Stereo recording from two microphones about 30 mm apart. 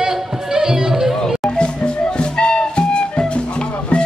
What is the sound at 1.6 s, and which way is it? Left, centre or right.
Music, left.